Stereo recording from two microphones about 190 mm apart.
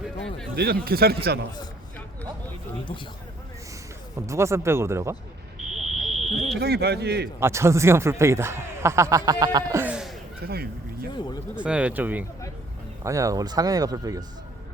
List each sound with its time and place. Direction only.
0.5 s speech: 55° right (ahead or behind)
4.3 s a man's voice: 15° right (ahead or behind)
5.8 s fire alarm: centre (ahead or behind)
6.6 s speech: 60° right (ahead or behind)
7.3 s a man's voice: 15° right (ahead or behind)
10.4 s speech: 55° right (ahead or behind)
11.5 s a man's voice: 5° right (ahead or behind)